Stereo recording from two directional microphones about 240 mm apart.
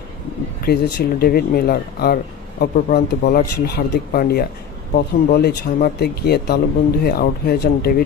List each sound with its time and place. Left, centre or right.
0.7 s speech: left